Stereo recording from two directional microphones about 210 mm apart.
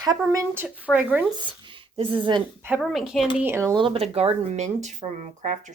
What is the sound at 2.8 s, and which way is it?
Speech, centre (ahead or behind).